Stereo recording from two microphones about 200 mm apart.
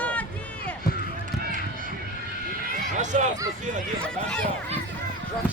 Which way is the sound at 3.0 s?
35° right (ahead or behind).